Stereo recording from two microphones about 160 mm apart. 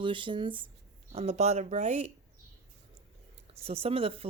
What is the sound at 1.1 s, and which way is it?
Speech, 40° right (ahead or behind).